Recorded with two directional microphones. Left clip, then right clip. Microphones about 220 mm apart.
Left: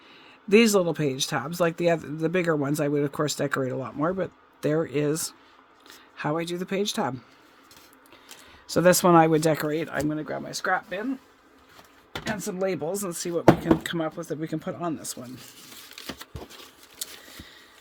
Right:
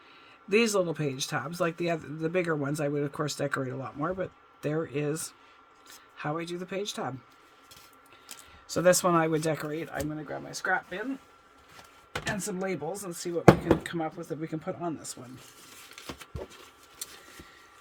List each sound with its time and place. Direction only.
0.4 s speech: 40° left (ahead or behind)
8.6 s speech: 40° left (ahead or behind)
12.4 s speech: 40° left (ahead or behind)